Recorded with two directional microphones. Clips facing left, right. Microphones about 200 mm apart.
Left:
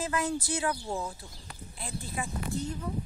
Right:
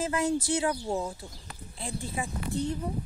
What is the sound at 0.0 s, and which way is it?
Speech, 25° right (ahead or behind).